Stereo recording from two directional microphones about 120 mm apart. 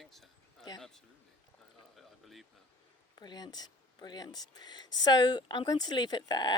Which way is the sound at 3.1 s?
35° left (ahead or behind).